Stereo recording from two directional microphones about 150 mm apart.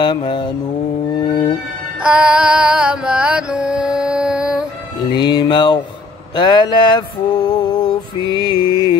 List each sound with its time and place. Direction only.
0.0 s mantra: 30° left (ahead or behind)
2.0 s music: 5° right (ahead or behind)
5.1 s music: 30° left (ahead or behind)
6.3 s mantra: 30° left (ahead or behind)